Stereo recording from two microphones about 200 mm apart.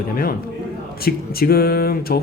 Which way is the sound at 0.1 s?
45° left (ahead or behind).